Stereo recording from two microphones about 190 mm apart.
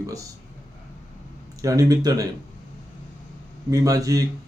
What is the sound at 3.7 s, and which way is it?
Speech, 20° right (ahead or behind).